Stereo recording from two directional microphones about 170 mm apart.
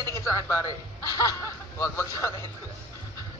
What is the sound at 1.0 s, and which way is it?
Speech, 20° left (ahead or behind).